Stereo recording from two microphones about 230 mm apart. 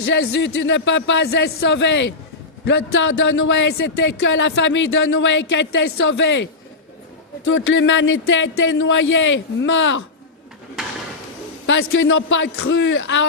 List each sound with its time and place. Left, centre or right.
0.0 s speech: left
11.6 s speech: left